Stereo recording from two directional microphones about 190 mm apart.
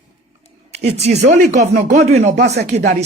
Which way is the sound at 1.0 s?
40° right (ahead or behind).